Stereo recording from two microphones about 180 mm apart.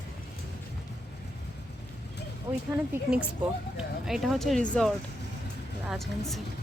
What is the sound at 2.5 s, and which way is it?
Speech, 25° right (ahead or behind).